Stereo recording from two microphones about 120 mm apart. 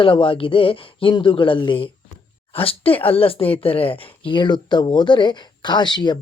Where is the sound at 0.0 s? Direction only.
45° left (ahead or behind).